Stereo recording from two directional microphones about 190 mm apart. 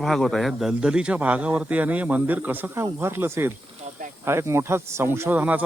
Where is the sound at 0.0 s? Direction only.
Centre (ahead or behind).